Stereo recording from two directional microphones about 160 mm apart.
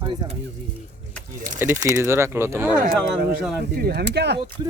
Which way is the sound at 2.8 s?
80° right.